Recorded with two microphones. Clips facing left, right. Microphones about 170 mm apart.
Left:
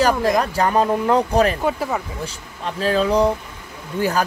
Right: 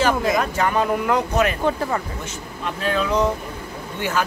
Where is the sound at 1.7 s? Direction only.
5° left (ahead or behind).